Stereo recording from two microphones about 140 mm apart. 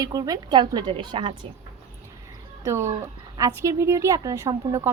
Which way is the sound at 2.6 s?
20° right (ahead or behind).